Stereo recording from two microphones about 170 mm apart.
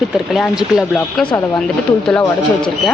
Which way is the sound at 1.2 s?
25° left (ahead or behind).